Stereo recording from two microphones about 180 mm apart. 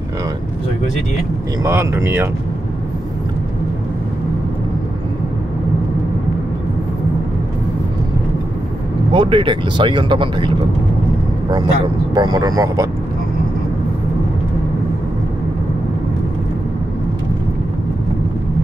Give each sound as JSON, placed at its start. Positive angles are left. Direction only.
{"t": 1.6, "sound": "speech", "side_deg": -15}
{"t": 9.1, "sound": "speech", "side_deg": -25}
{"t": 11.5, "sound": "speech", "side_deg": -25}